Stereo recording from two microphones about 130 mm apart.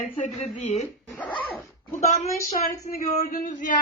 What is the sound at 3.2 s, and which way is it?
Male singing, 80° left.